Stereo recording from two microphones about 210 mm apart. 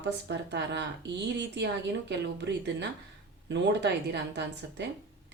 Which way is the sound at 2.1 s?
55° right (ahead or behind).